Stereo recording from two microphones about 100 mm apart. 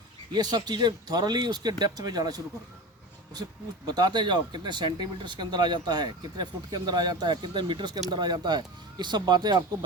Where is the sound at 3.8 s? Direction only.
40° right (ahead or behind).